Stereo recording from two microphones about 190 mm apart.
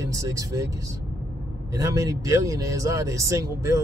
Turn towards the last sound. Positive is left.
turn(degrees=-15)  # may be behind; listen again after turning